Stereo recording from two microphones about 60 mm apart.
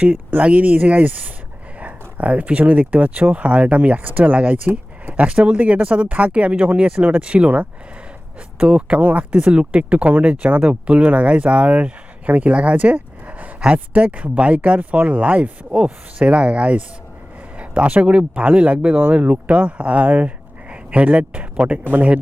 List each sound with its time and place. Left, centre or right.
0.4 s speech: right